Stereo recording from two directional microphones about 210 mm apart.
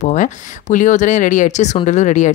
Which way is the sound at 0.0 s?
35° left (ahead or behind).